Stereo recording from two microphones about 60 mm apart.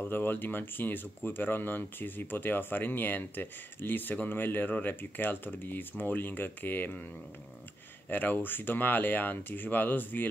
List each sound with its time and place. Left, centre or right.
0.1 s speech: left
8.1 s speech: left